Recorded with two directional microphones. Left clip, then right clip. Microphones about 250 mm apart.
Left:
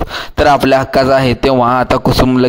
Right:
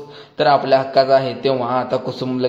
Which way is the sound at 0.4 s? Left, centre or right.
Left.